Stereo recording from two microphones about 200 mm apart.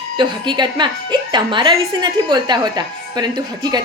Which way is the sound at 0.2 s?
20° right (ahead or behind).